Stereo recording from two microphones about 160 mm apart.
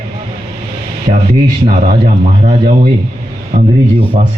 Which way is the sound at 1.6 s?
35° right (ahead or behind).